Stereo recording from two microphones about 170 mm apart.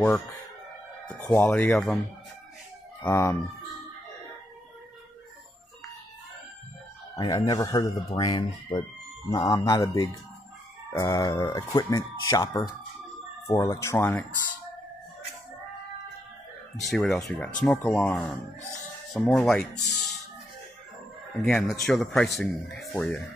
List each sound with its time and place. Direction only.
1.0 s speech: 10° left (ahead or behind)
3.0 s speech: 15° left (ahead or behind)
7.2 s speech: 20° left (ahead or behind)
16.8 s speech: centre (ahead or behind)
19.9 s music: centre (ahead or behind)
21.4 s speech: centre (ahead or behind)